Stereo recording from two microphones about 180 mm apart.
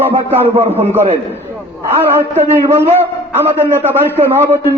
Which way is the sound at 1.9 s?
10° right (ahead or behind).